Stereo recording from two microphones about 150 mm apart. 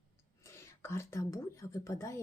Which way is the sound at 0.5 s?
15° left (ahead or behind).